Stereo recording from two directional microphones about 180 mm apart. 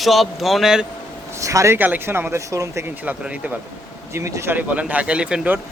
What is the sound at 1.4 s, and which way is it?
Speech, 15° right (ahead or behind).